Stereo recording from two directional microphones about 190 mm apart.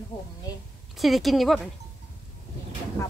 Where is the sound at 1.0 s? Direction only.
Centre (ahead or behind).